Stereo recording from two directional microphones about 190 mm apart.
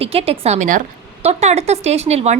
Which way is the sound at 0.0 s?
30° right (ahead or behind).